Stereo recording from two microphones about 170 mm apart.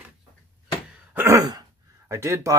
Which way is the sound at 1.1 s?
15° right (ahead or behind).